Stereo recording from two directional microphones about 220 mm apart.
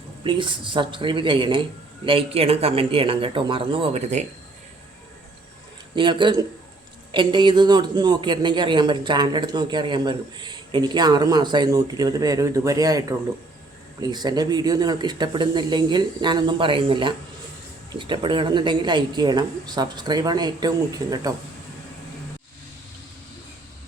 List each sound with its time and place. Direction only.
0.3 s a man's voice: 20° right (ahead or behind)
5.9 s a man's voice: 20° right (ahead or behind)